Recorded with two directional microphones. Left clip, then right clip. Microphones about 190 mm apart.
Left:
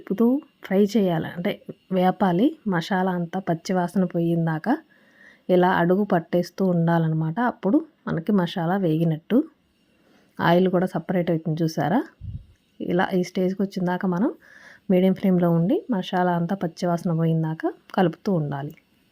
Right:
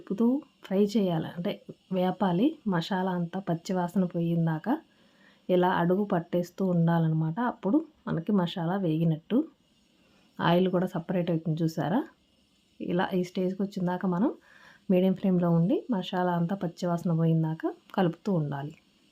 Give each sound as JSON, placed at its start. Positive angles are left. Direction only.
{"t": 0.0, "sound": "speech", "side_deg": 25}